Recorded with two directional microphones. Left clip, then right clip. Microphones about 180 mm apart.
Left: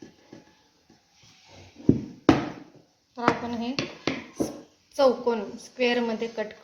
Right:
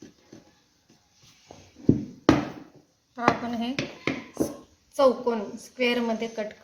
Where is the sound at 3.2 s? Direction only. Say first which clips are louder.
Right 1 dB; centre (ahead or behind).